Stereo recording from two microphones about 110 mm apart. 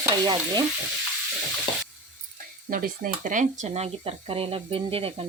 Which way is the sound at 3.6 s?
65° right (ahead or behind).